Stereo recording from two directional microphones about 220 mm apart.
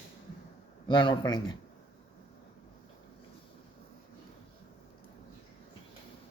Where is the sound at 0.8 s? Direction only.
20° left (ahead or behind).